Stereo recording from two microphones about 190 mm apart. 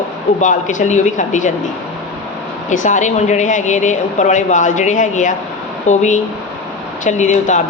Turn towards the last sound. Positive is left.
turn(degrees=40)  # may be behind; listen again after turning